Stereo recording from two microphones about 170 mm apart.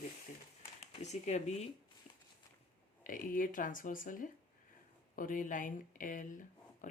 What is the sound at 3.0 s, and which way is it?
Speech, 55° left (ahead or behind).